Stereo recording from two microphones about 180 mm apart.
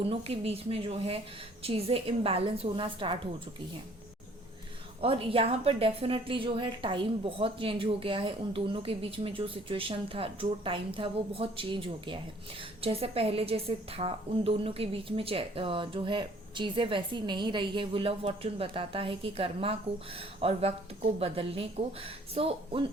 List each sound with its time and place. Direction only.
0.0 s a woman's voice: 35° right (ahead or behind)
4.9 s a woman's voice: 30° right (ahead or behind)